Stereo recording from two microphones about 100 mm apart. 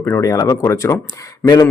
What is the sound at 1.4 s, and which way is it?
Speech, 40° left (ahead or behind).